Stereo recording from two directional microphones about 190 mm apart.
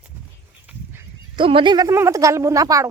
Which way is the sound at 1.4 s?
25° right (ahead or behind).